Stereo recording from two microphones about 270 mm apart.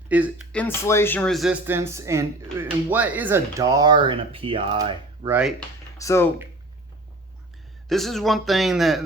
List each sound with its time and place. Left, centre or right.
0.1 s speech: centre
0.6 s speech: centre
6.0 s speech: centre
7.9 s speech: centre